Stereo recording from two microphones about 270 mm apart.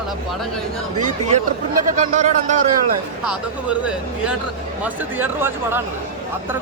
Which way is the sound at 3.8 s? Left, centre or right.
Centre.